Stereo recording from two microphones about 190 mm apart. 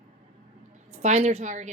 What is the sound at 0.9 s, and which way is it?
Speech, 35° right (ahead or behind).